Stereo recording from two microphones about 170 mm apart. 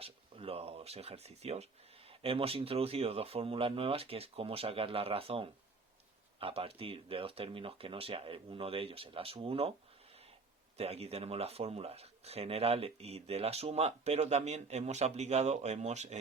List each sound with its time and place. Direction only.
0.0 s speech: 35° right (ahead or behind)
10.8 s speech: 35° right (ahead or behind)